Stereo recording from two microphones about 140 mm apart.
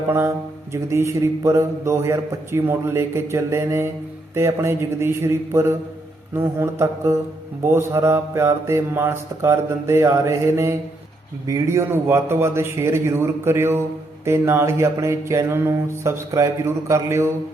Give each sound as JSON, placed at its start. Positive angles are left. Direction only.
{"t": 0.1, "sound": "mantra", "side_deg": -20}